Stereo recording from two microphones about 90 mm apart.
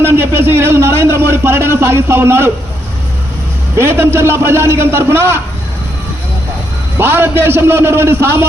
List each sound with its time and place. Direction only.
0.0 s a man's voice: 25° right (ahead or behind)
3.8 s a man's voice: 25° right (ahead or behind)
7.0 s a man's voice: 25° right (ahead or behind)